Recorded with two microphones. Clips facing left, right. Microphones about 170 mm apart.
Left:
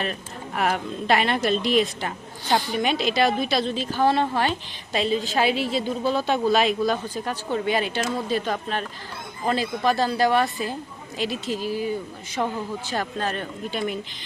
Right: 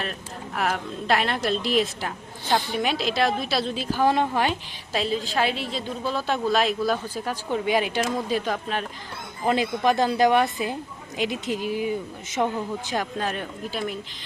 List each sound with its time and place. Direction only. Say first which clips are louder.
0.0 s a woman's voice: left 3 dB; centre (ahead or behind)